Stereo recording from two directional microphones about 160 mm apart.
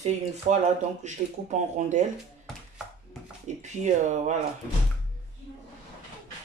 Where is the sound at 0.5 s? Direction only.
45° right (ahead or behind).